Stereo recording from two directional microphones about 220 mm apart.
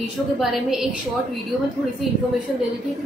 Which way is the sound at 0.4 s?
Centre (ahead or behind).